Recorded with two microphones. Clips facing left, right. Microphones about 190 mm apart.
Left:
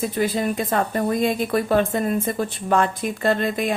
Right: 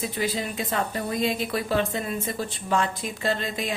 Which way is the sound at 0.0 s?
50° left (ahead or behind).